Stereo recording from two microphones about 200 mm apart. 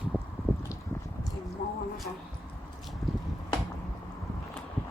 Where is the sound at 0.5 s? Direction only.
Centre (ahead or behind).